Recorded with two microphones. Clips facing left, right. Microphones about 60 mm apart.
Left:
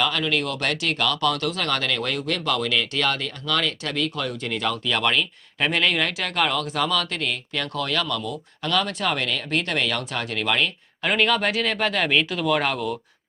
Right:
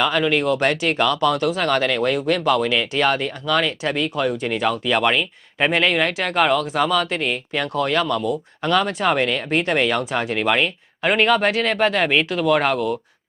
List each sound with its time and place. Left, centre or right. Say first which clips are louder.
0.0 s speech: right 5 dB; right